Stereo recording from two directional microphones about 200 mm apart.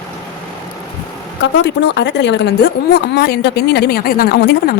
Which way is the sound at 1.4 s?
60° left (ahead or behind).